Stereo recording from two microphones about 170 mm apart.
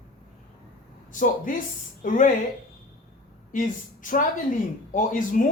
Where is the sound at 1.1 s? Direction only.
50° left (ahead or behind).